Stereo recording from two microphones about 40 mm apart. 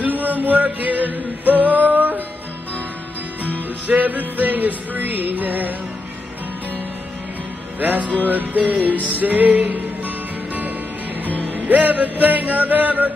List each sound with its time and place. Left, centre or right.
0.0 s music: right
3.5 s music: right
7.8 s music: right